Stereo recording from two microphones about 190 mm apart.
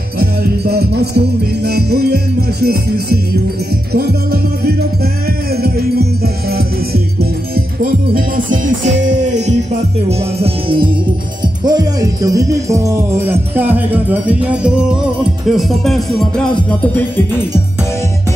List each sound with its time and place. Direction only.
0.2 s music: 55° right (ahead or behind); by 9.6 s 40° right (ahead or behind)
10.0 s music: 30° right (ahead or behind)
11.6 s speech: 20° right (ahead or behind)
15.4 s music: centre (ahead or behind)